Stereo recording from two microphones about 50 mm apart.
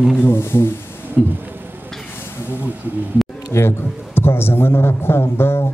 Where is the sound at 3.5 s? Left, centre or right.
Left.